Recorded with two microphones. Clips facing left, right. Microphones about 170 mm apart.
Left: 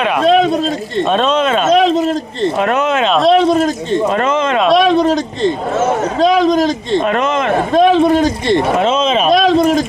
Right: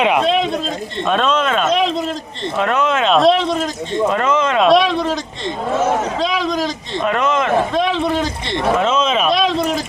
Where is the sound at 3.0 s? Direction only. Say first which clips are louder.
Right 1 dB; centre (ahead or behind).